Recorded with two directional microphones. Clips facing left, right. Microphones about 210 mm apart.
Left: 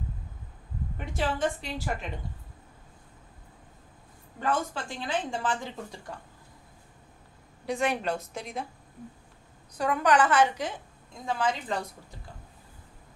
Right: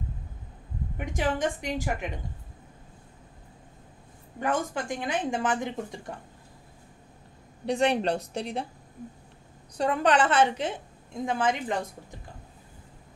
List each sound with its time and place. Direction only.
0.9 s a woman's voice: 15° right (ahead or behind)
4.4 s a woman's voice: 15° right (ahead or behind)
7.6 s speech: 30° right (ahead or behind)
9.8 s a woman's voice: 30° right (ahead or behind)